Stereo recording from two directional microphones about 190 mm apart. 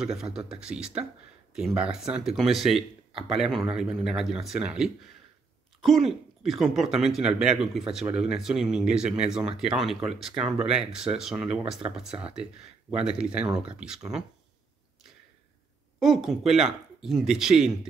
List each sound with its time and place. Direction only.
0.0 s speech: 5° right (ahead or behind)
3.1 s a sound: 30° right (ahead or behind)
3.3 s speech: centre (ahead or behind)
13.0 s speech: 5° right (ahead or behind)
16.0 s speech: centre (ahead or behind)